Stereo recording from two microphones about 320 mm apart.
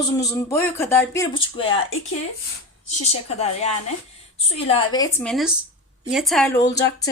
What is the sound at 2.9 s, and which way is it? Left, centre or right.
A woman's voice, left.